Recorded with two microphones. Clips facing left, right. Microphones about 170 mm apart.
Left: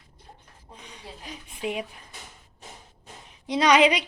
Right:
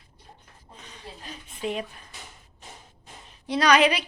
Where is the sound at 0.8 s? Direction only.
10° left (ahead or behind).